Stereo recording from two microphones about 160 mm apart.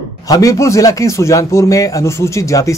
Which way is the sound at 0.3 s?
20° left (ahead or behind).